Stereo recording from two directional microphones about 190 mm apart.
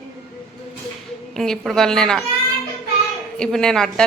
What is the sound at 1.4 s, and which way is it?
Speech, centre (ahead or behind).